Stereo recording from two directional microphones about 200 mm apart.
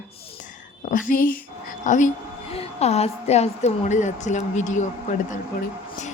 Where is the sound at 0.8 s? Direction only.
40° left (ahead or behind).